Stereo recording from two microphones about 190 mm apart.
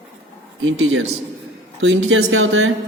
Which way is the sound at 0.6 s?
90° right.